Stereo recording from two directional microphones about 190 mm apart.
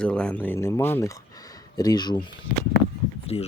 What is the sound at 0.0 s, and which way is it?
Speech, 5° left (ahead or behind).